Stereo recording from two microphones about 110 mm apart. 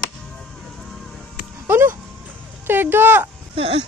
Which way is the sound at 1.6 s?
25° right (ahead or behind).